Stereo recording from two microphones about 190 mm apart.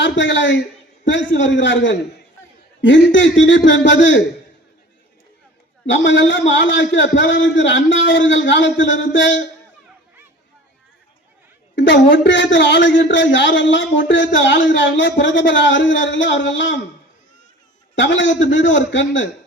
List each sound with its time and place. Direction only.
0.0 s a woman's voice: 70° left (ahead or behind)
5.9 s a woman's voice: 75° left (ahead or behind)
11.8 s a woman's voice: 70° left (ahead or behind)
17.9 s a woman's voice: 70° left (ahead or behind)